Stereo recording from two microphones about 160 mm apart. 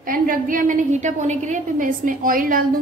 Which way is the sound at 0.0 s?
60° right (ahead or behind).